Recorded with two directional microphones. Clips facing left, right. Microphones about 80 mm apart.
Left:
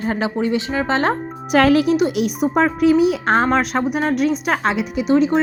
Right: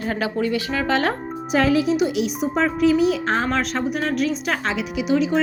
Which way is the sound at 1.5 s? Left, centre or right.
Left.